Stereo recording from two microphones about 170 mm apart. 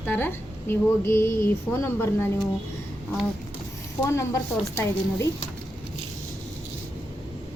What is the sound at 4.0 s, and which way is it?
A woman's voice, 15° left (ahead or behind).